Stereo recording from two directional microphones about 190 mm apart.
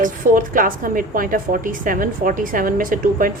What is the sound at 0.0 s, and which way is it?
A woman's voice, 45° right (ahead or behind).